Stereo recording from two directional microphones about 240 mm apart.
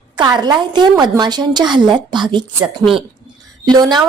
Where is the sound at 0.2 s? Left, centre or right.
Centre.